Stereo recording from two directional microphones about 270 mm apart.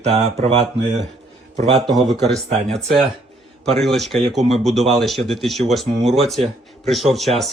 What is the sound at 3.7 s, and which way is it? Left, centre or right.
Speech, centre.